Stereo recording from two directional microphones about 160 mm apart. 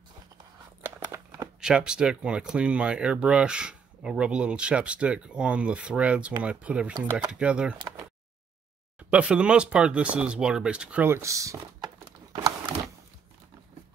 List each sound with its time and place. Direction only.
0.8 s crumpling: 15° right (ahead or behind)
1.6 s speech: 5° right (ahead or behind)
9.1 s speech: 5° right (ahead or behind)
12.0 s a sound: 30° right (ahead or behind)